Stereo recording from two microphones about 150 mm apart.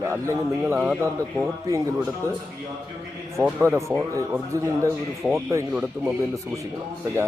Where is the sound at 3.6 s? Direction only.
20° right (ahead or behind).